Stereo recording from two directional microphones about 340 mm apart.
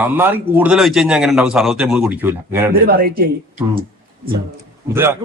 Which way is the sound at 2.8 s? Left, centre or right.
Right.